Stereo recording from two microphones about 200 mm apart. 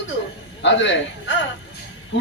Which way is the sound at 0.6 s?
65° left (ahead or behind).